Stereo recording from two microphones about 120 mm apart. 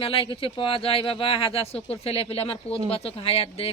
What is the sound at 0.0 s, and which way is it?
Speech, 50° left (ahead or behind).